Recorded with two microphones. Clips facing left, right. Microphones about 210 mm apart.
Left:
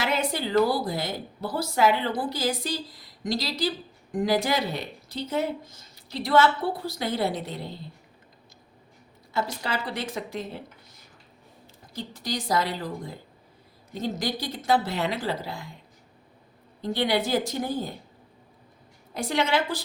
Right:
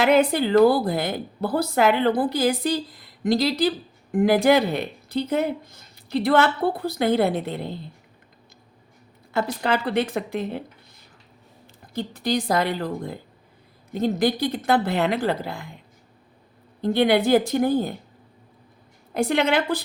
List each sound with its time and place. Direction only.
0.0 s a woman's voice: 55° right (ahead or behind)
9.3 s a woman's voice: 60° right (ahead or behind)
11.9 s a woman's voice: 60° right (ahead or behind)
16.8 s a woman's voice: 55° right (ahead or behind)
19.1 s a woman's voice: 60° right (ahead or behind)